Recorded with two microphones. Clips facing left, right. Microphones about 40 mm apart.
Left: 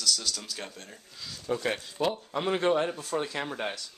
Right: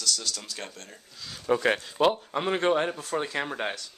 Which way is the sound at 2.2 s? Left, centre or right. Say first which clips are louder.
Right 1 dB; right.